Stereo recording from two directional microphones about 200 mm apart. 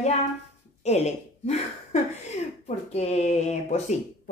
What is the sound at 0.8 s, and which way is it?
Speech, 35° left (ahead or behind).